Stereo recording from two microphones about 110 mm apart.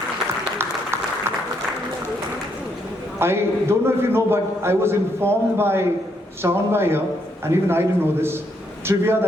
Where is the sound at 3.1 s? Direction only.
20° right (ahead or behind).